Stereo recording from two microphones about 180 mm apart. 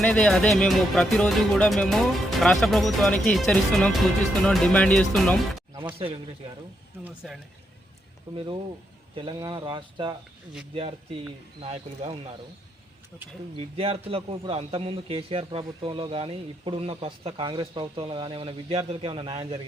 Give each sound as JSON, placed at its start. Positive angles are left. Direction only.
{"t": 0.0, "sound": "speech", "side_deg": 5}
{"t": 5.7, "sound": "speech", "side_deg": -30}
{"t": 7.2, "sound": "speech", "side_deg": 0}
{"t": 9.1, "sound": "speech", "side_deg": -25}
{"t": 11.6, "sound": "a man's voice", "side_deg": -35}
{"t": 13.6, "sound": "a man's voice", "side_deg": -30}